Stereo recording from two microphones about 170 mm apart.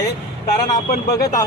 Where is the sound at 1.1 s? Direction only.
20° left (ahead or behind).